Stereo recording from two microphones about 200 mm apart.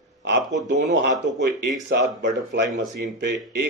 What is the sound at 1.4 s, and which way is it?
Speech, 60° right (ahead or behind).